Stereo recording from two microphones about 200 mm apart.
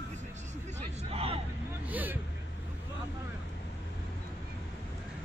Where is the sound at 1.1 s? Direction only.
30° right (ahead or behind).